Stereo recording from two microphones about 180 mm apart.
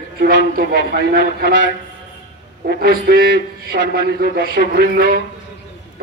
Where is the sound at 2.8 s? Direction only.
55° right (ahead or behind).